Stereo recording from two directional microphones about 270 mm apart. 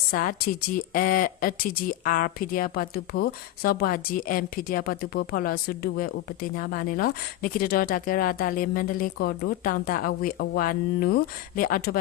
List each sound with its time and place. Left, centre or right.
0.1 s speech: left